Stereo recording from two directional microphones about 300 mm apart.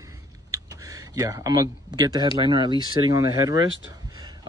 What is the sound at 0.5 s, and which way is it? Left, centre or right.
Speech, centre.